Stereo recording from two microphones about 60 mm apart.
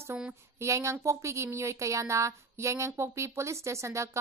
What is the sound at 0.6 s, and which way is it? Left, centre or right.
Speech, right.